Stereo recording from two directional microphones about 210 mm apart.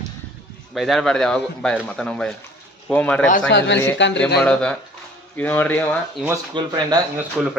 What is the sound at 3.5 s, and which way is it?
Speech, 55° left (ahead or behind).